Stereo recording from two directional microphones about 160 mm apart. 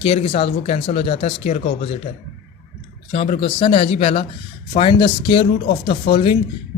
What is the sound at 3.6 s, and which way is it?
Speech, 35° left (ahead or behind).